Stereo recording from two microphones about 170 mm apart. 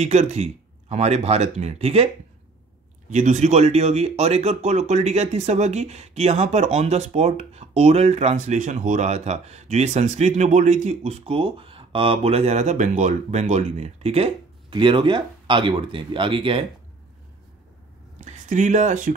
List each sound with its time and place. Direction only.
0.0 s speech: 40° right (ahead or behind)
3.1 s speech: 45° right (ahead or behind)
18.2 s speech: 45° right (ahead or behind)